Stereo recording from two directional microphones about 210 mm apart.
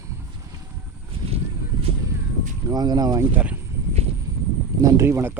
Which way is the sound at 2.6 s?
20° right (ahead or behind).